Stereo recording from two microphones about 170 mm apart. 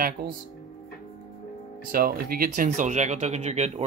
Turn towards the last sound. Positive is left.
turn(degrees=-40)  # may be behind; listen again after turning